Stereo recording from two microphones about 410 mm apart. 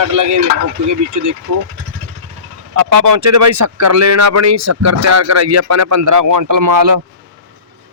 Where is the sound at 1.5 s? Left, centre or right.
Right.